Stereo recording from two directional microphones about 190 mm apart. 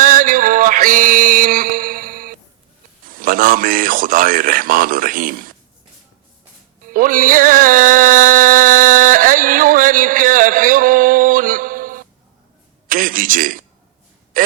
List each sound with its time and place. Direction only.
0.0 s music: 45° right (ahead or behind)
3.1 s a man's voice: 45° right (ahead or behind)
6.8 s music: 45° right (ahead or behind)
12.9 s a sound: 45° right (ahead or behind)
14.3 s a man's voice: 45° right (ahead or behind)